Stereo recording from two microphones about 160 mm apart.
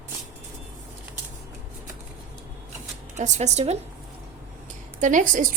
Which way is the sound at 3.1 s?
45° right (ahead or behind).